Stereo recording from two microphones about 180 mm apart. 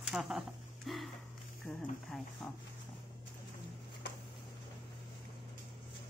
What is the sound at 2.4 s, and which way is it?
Speech, 5° left (ahead or behind).